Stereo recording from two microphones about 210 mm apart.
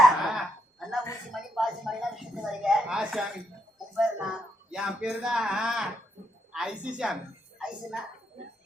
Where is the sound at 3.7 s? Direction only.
Centre (ahead or behind).